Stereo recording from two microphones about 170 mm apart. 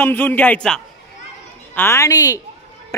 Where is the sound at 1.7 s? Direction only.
15° left (ahead or behind).